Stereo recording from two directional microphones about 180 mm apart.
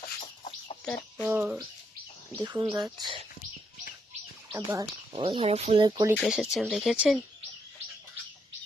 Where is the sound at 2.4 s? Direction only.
25° right (ahead or behind).